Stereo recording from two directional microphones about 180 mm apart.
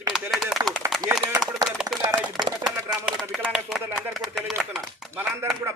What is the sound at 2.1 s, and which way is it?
Speech, 20° right (ahead or behind).